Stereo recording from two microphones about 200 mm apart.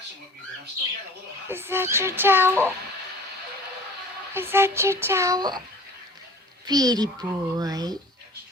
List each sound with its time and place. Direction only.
1.5 s speech: 10° right (ahead or behind)
4.4 s speech: 10° right (ahead or behind)
6.7 s a child's voice: 20° right (ahead or behind)